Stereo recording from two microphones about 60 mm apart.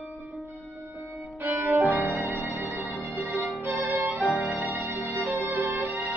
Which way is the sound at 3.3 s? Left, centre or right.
Right.